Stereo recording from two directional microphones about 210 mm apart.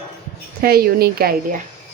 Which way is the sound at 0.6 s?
45° right (ahead or behind).